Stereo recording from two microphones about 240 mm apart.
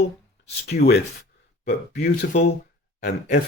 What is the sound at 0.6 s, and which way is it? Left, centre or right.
Speech, left.